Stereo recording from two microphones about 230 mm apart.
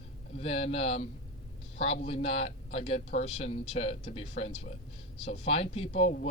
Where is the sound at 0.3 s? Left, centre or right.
Left.